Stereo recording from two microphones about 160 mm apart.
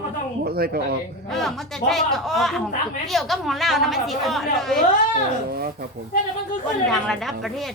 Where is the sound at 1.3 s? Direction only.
Centre (ahead or behind).